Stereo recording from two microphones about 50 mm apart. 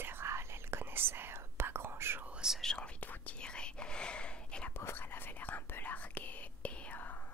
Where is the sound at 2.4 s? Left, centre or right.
Centre.